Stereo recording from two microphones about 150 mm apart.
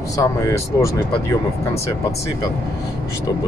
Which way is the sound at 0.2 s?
20° left (ahead or behind).